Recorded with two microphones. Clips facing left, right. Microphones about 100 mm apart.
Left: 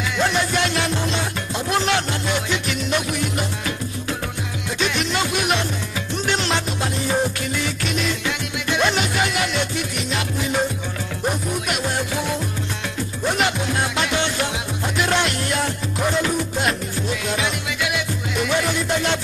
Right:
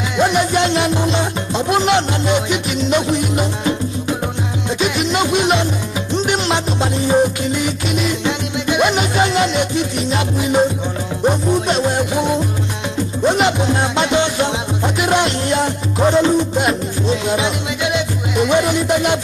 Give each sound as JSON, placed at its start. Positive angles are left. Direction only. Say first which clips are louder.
{"t": 0.2, "sound": "music", "louder": "right 6 dB", "side_deg": -20}
{"t": 9.9, "sound": "music", "louder": "right 5 dB", "side_deg": -35}
{"t": 10.4, "sound": "music", "louder": "right 8 dB", "side_deg": -20}